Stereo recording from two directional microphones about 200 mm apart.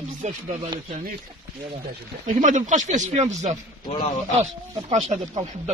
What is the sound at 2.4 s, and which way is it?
Speech, 40° right (ahead or behind).